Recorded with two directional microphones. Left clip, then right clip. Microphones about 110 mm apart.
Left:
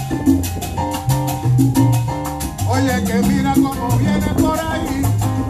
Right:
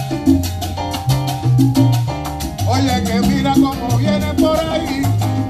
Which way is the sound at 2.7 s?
30° right (ahead or behind).